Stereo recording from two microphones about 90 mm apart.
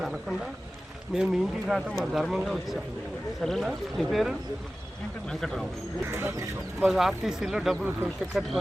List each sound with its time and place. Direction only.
0.0 s speech: centre (ahead or behind)
6.1 s a sound: 25° right (ahead or behind)
6.8 s speech: centre (ahead or behind)